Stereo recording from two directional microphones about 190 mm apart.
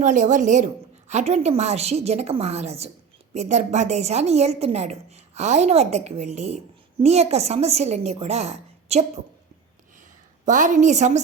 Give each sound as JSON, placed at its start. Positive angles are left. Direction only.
{"t": 0.0, "sound": "a woman's voice", "side_deg": -40}
{"t": 10.4, "sound": "a woman's voice", "side_deg": -40}